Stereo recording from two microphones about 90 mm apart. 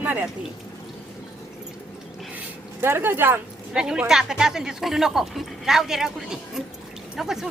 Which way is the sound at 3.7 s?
10° right (ahead or behind).